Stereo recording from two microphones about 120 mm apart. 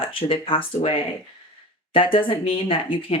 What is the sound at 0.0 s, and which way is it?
Speech, 50° left (ahead or behind).